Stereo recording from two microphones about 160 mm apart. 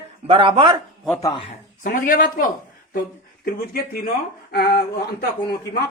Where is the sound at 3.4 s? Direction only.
70° left (ahead or behind).